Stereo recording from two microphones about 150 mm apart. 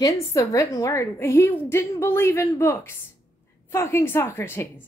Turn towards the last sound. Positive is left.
turn(degrees=15)  # may be behind; listen again after turning